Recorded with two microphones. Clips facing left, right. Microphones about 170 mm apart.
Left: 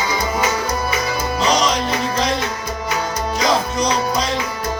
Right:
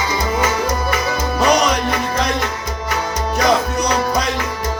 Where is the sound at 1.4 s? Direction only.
60° right (ahead or behind).